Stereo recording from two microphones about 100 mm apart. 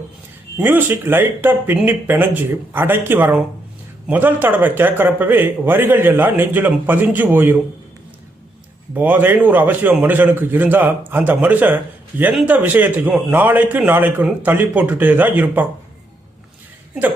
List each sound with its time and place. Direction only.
0.5 s a man's voice: 20° right (ahead or behind)
9.0 s a man's voice: 20° right (ahead or behind)
14.2 s a man's voice: 10° right (ahead or behind)